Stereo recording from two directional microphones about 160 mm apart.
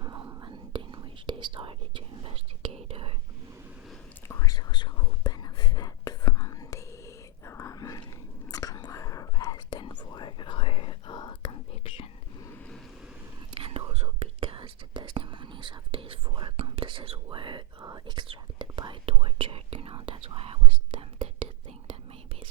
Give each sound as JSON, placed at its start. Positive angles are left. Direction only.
{"t": 0.0, "sound": "whispering", "side_deg": -25}
{"t": 4.3, "sound": "whispering", "side_deg": 20}
{"t": 12.4, "sound": "vehicle", "side_deg": 15}
{"t": 13.5, "sound": "whispering", "side_deg": -35}